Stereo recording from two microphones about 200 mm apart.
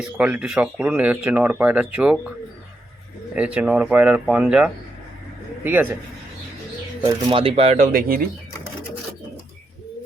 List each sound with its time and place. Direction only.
0.0 s speech: 5° right (ahead or behind)
3.3 s speech: 5° right (ahead or behind)
7.3 s speech: 25° right (ahead or behind); by 8.2 s 45° right (ahead or behind)